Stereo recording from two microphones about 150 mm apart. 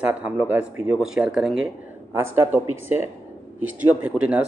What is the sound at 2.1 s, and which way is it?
A man's voice, 15° right (ahead or behind).